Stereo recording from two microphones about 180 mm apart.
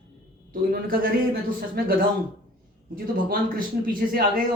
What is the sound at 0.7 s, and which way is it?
A man's voice, 55° right (ahead or behind).